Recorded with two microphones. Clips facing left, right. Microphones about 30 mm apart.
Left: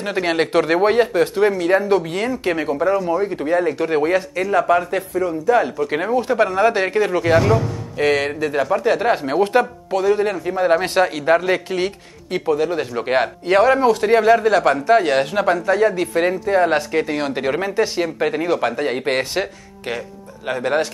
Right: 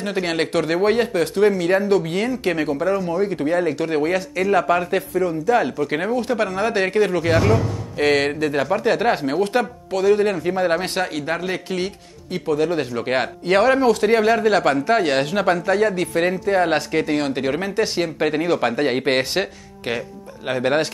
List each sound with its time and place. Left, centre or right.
0.0 s speech: centre
3.2 s speech: centre
4.5 s speech: centre
8.0 s speech: centre
9.3 s speech: centre
9.9 s speech: centre
10.8 s speech: centre
12.9 s speech: centre
17.9 s speech: centre
18.8 s speech: right